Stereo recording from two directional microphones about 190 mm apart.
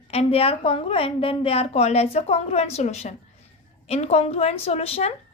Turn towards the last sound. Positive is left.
turn(degrees=30)  # may be behind; listen again after turning